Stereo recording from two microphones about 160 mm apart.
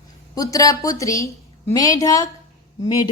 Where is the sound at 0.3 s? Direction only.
20° left (ahead or behind).